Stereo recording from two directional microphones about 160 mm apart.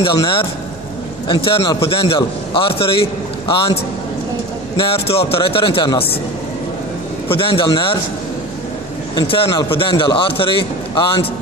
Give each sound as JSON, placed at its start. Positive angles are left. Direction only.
{"t": 0.0, "sound": "a man's voice", "side_deg": 30}
{"t": 4.7, "sound": "a man's voice", "side_deg": 35}
{"t": 7.2, "sound": "a man's voice", "side_deg": 35}
{"t": 9.1, "sound": "a man's voice", "side_deg": 30}